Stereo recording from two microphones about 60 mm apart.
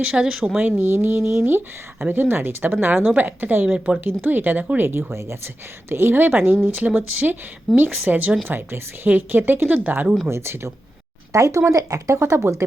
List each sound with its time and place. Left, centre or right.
0.1 s speech: centre
0.8 s speech: right
4.9 s speech: right
10.2 s speech: right
11.3 s speech: right